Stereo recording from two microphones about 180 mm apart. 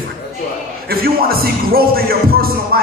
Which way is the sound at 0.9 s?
55° right (ahead or behind).